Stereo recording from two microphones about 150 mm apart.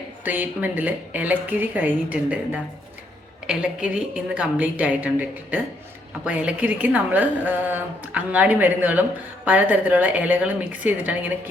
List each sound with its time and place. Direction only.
0.3 s a woman's voice: 10° right (ahead or behind)